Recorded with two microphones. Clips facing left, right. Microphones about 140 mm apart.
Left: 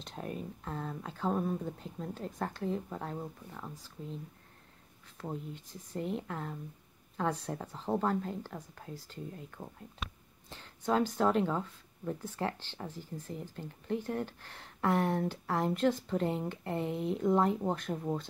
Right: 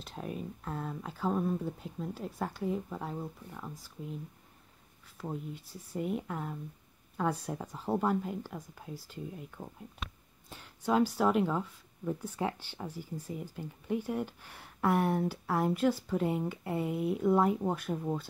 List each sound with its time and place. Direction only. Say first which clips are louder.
0.0 s a woman's voice: right 1 dB; 5° right (ahead or behind)